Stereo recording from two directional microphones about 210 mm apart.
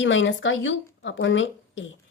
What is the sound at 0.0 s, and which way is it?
Speech, 60° left (ahead or behind).